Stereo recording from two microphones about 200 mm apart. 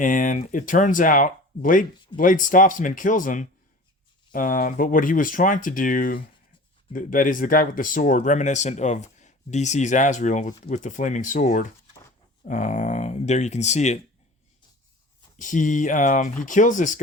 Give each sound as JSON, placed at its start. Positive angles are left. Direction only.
{"t": 0.0, "sound": "speech", "side_deg": 40}
{"t": 15.4, "sound": "speech", "side_deg": 40}